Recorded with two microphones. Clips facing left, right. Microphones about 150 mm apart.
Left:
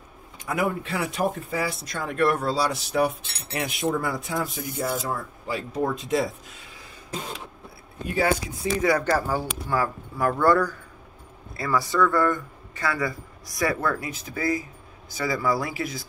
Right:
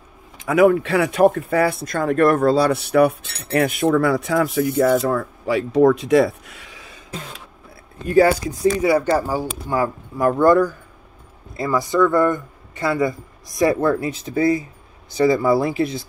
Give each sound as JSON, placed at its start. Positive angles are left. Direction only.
{"t": 0.5, "sound": "speech", "side_deg": -90}
{"t": 8.1, "sound": "speech", "side_deg": -40}
{"t": 8.8, "sound": "a man's voice", "side_deg": -10}